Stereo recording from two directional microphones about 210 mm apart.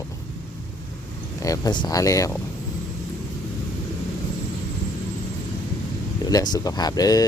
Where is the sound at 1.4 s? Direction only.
15° left (ahead or behind).